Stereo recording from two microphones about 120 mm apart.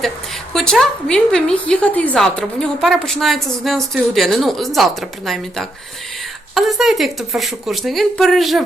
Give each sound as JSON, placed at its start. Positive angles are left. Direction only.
{"t": 0.5, "sound": "a woman's voice", "side_deg": 5}